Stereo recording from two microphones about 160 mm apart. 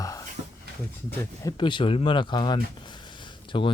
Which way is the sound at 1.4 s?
30° left (ahead or behind).